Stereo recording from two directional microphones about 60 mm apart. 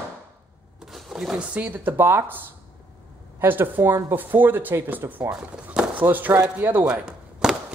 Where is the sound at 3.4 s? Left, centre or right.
Right.